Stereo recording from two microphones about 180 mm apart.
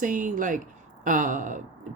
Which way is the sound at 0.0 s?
45° right (ahead or behind).